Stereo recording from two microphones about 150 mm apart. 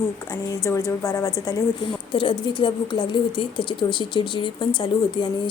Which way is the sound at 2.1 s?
35° left (ahead or behind).